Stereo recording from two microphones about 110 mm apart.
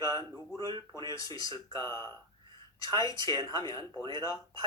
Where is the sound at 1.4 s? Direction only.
35° left (ahead or behind).